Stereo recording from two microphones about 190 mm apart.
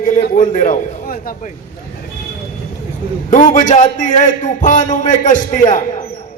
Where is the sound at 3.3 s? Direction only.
40° left (ahead or behind).